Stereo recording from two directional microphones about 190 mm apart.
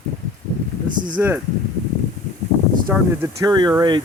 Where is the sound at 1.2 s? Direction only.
10° right (ahead or behind).